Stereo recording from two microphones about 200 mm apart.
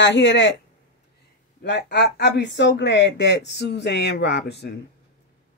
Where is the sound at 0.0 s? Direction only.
60° left (ahead or behind).